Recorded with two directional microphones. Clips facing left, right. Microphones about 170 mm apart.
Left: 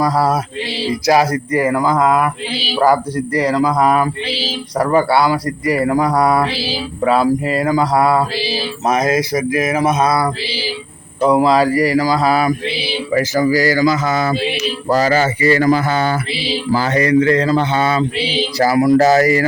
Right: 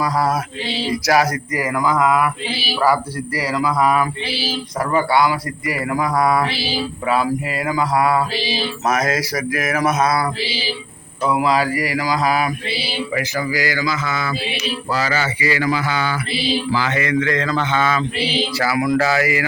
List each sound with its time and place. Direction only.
0.0 s speech: 35° left (ahead or behind)
8.9 s a sound: 25° left (ahead or behind)
11.2 s speech: 35° left (ahead or behind)